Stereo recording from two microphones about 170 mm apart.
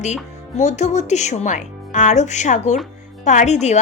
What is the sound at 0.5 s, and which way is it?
Speech, 45° left (ahead or behind).